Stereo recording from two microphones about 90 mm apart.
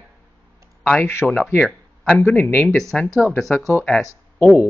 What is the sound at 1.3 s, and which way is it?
Speech, 15° left (ahead or behind).